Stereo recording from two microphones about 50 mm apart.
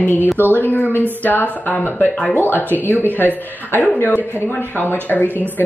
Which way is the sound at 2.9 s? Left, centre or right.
Left.